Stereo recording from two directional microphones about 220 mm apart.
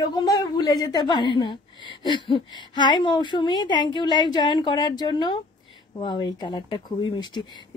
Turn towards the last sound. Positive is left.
turn(degrees=20)  # may be behind; listen again after turning